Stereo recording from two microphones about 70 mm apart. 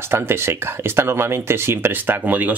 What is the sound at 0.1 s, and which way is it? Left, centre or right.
Speech, right.